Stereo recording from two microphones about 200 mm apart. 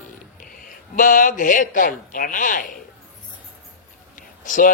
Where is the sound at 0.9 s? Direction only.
40° left (ahead or behind).